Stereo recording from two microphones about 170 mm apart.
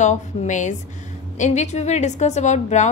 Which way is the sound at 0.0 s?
45° left (ahead or behind).